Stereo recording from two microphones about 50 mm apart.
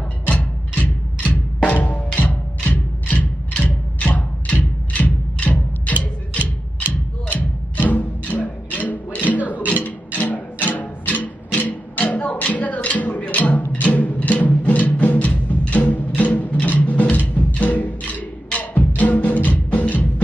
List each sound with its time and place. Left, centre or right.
0.3 s drum: left
2.1 s music: left